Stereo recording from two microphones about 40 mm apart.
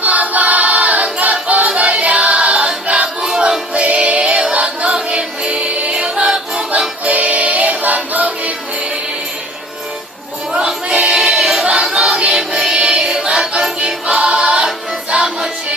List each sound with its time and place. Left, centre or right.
0.0 s choir: right
2.9 s a sound: right
3.8 s music: right
6.3 s music: centre
6.7 s music: right
10.9 s music: right
11.2 s choir: centre
11.6 s choir: centre
12.1 s music: right
12.4 s music: centre
13.8 s choir: right